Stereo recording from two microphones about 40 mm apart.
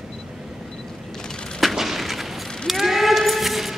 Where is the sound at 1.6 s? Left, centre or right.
Centre.